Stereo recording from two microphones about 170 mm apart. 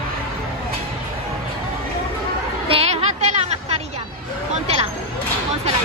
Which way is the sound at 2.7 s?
35° right (ahead or behind).